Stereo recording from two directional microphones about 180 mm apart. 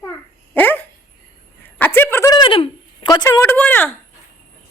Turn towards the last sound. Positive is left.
turn(degrees=10)  # may be behind; listen again after turning